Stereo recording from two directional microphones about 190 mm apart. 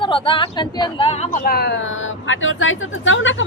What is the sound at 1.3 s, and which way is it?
Speech, 50° left (ahead or behind).